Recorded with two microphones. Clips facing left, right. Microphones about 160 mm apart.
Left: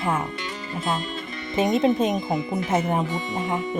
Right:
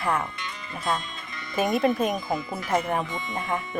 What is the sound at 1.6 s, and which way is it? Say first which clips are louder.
Speech: left 3 dB; 20° left (ahead or behind).